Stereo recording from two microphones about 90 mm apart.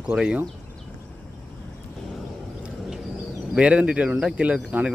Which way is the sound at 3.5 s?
10° right (ahead or behind).